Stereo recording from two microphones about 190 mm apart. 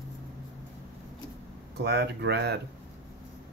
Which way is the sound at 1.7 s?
60° right (ahead or behind).